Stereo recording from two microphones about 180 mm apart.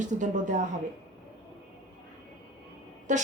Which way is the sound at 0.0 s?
45° right (ahead or behind).